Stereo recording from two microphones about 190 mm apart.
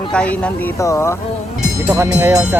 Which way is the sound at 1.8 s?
15° right (ahead or behind).